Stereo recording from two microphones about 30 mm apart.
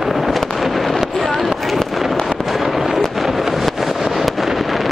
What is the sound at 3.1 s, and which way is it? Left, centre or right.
Vehicle, centre.